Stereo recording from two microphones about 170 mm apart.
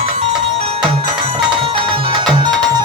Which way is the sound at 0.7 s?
30° right (ahead or behind).